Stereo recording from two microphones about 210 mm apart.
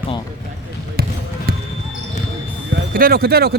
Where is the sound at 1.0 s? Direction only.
45° right (ahead or behind).